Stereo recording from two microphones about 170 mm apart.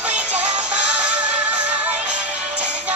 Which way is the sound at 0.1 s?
45° right (ahead or behind).